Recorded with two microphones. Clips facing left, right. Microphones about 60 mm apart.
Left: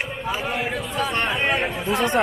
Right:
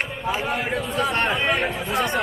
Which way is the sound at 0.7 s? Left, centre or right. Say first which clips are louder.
Right 2 dB; centre.